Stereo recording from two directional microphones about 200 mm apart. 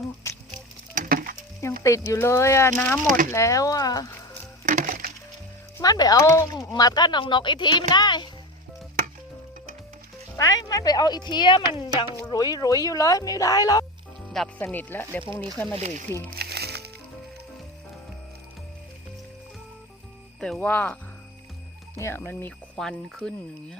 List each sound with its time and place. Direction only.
0.9 s splinter: 45° right (ahead or behind)
1.8 s speech: 15° left (ahead or behind)
4.6 s music: 40° right (ahead or behind)
5.7 s speech: 20° left (ahead or behind)
10.3 s speech: 15° left (ahead or behind)
14.3 s speech: 5° left (ahead or behind)
15.2 s speech: 25° right (ahead or behind)
15.5 s speech: 5° left (ahead or behind)
16.4 s music: 55° right (ahead or behind)
20.4 s speech: 5° left (ahead or behind)